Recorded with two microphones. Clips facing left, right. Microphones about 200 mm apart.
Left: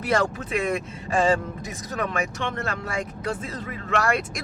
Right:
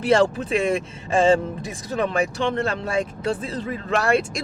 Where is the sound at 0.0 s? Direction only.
30° right (ahead or behind).